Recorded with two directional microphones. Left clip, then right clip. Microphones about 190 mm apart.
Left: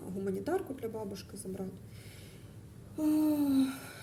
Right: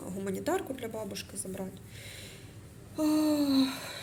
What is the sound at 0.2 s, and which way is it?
Speech, centre (ahead or behind).